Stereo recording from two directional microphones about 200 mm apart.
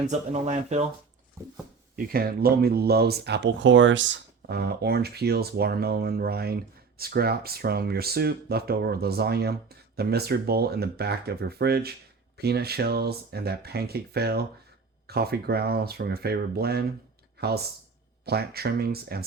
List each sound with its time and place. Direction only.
0.1 s speech: 35° right (ahead or behind)
1.4 s a sound: 15° right (ahead or behind)
2.0 s speech: 50° right (ahead or behind)
18.3 s speech: 50° right (ahead or behind)